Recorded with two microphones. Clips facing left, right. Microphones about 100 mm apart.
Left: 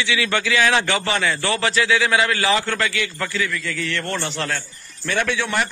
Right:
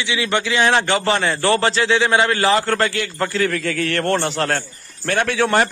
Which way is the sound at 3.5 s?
65° right (ahead or behind).